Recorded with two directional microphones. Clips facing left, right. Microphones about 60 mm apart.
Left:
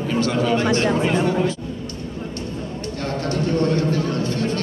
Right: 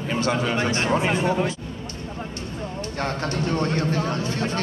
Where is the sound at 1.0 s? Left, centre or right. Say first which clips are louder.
Left 3 dB; centre.